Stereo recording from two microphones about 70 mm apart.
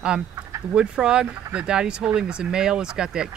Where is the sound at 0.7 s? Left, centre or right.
Centre.